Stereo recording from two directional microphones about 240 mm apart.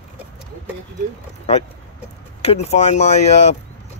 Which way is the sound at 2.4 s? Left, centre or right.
Left.